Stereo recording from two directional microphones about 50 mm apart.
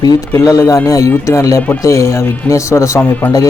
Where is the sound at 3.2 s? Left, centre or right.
Left.